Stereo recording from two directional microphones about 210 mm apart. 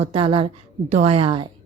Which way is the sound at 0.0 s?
25° right (ahead or behind).